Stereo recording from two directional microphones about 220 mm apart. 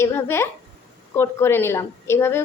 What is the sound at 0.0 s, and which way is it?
A woman's voice, 10° left (ahead or behind).